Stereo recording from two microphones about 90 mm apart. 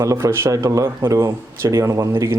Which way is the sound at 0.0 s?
35° right (ahead or behind).